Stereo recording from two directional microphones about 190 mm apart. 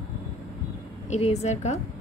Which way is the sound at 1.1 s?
35° left (ahead or behind).